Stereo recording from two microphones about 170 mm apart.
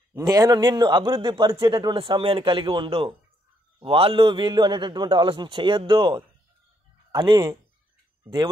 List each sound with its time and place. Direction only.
0.1 s a man's voice: 20° right (ahead or behind)